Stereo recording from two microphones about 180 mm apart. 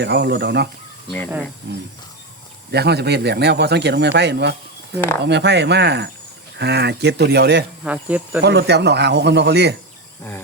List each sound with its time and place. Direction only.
0.0 s speech: 70° right (ahead or behind)
7.9 s speech: 5° right (ahead or behind)
8.4 s speech: 65° right (ahead or behind)